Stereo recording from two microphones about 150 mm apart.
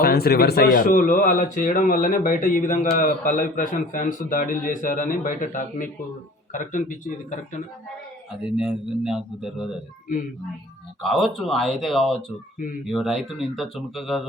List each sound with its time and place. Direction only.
0.0 s speech: 90° left; by 7.6 s 55° left (ahead or behind)
8.4 s speech: 5° right (ahead or behind)
11.0 s speech: centre (ahead or behind)
12.5 s speech: 65° left (ahead or behind)
12.9 s speech: centre (ahead or behind)